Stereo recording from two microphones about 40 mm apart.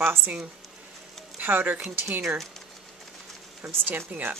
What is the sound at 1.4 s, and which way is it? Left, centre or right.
Speech, right.